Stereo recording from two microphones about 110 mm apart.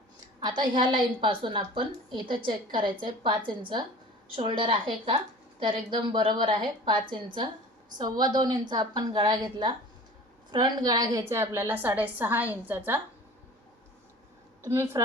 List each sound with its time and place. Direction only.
0.3 s a woman's voice: 45° right (ahead or behind); by 13.0 s 15° right (ahead or behind)
14.6 s a woman's voice: 25° right (ahead or behind)